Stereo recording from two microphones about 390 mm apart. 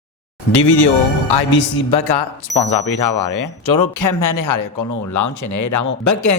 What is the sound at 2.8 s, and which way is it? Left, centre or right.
Speech, left.